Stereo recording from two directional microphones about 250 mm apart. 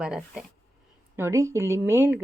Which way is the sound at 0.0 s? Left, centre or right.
Centre.